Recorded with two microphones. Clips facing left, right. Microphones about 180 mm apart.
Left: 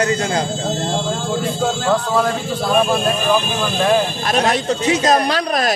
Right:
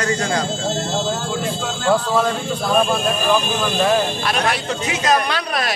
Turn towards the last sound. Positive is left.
turn(degrees=40)  # may be behind; listen again after turning